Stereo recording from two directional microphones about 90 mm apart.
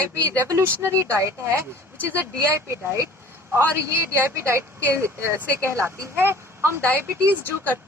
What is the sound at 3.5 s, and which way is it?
Speech, 25° right (ahead or behind).